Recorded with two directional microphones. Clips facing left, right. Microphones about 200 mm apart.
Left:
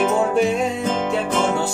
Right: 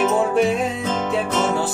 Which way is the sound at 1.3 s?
10° left (ahead or behind).